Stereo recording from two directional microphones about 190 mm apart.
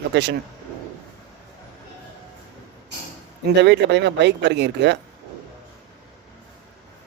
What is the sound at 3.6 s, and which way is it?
Speech, 65° right (ahead or behind).